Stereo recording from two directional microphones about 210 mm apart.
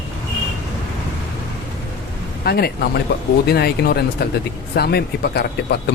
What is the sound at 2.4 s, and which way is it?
Speech, 50° left (ahead or behind).